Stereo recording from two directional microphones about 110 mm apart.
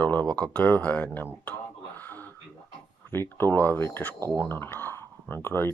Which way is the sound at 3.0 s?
20° left (ahead or behind).